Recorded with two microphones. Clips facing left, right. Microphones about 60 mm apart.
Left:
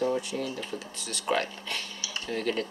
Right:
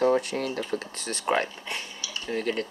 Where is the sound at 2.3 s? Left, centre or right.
Centre.